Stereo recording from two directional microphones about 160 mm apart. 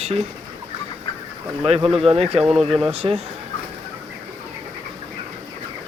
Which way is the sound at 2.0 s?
40° right (ahead or behind).